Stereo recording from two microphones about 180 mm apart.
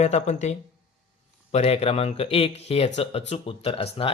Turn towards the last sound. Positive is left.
turn(degrees=30)  # may be behind; listen again after turning